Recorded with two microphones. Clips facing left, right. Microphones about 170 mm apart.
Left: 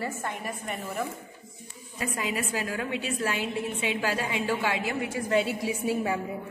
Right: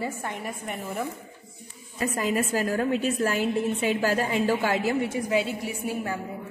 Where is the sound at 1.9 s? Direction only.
45° right (ahead or behind).